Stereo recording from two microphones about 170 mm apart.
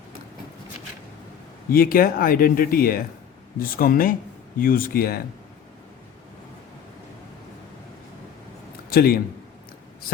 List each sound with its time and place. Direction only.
1.7 s speech: 60° left (ahead or behind)
8.9 s speech: 65° left (ahead or behind)